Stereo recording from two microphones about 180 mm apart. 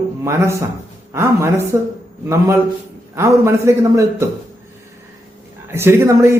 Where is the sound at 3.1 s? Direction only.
15° right (ahead or behind).